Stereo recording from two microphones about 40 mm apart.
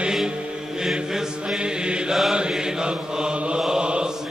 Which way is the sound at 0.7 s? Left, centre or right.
Centre.